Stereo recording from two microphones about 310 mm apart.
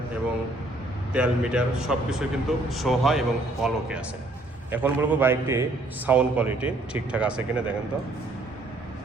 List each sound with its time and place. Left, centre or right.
1.1 s a man's voice: centre